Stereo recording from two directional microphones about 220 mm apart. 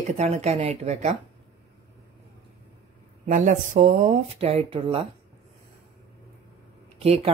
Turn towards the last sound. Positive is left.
turn(degrees=-25)  # may be behind; listen again after turning